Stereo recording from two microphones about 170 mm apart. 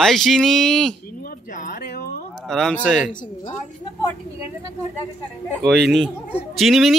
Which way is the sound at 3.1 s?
50° left (ahead or behind).